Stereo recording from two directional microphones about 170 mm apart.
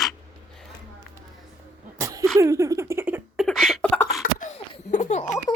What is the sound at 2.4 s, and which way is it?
Speech, 20° right (ahead or behind).